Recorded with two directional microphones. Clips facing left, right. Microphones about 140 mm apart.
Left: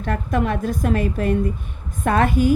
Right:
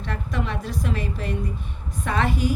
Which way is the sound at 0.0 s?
50° left (ahead or behind).